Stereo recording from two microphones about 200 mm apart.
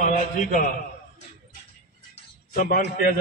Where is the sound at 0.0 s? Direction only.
40° left (ahead or behind).